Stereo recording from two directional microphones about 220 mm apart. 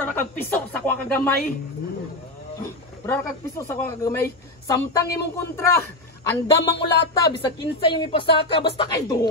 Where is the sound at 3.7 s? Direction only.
10° left (ahead or behind).